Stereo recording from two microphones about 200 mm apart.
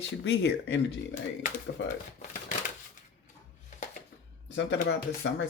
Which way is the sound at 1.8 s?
70° left (ahead or behind).